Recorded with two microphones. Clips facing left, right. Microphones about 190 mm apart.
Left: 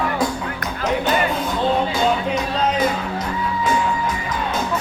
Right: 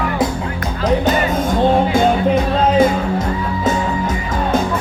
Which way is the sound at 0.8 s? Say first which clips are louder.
Right 4 dB; 40° right (ahead or behind).